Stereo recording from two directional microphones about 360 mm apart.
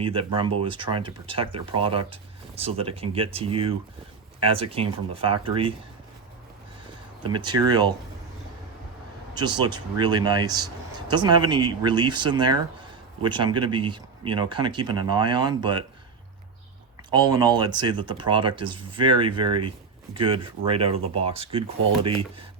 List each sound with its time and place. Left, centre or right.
0.0 s speech: centre
7.3 s speech: centre
9.3 s speech: centre
17.1 s speech: centre